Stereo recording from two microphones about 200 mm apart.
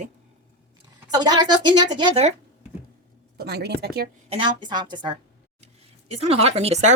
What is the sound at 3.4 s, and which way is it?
Speech, 55° right (ahead or behind).